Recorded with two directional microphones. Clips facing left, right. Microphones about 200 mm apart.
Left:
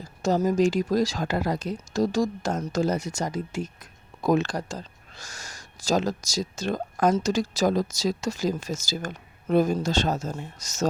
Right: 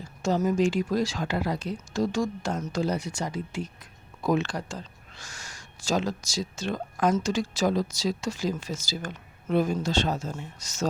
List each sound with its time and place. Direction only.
0.2 s speech: 40° left (ahead or behind)